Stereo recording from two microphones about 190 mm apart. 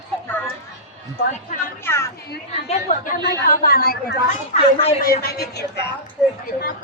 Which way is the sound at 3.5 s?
50° left (ahead or behind).